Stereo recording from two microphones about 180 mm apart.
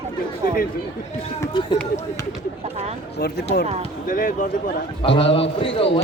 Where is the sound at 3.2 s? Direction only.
65° left (ahead or behind).